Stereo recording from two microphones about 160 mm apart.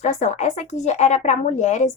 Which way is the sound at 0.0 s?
45° left (ahead or behind).